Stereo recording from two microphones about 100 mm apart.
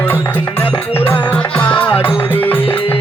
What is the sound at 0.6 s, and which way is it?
Music, 20° left (ahead or behind).